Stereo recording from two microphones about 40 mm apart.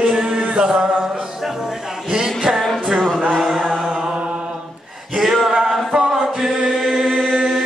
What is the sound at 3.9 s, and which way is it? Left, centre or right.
Mantra, right.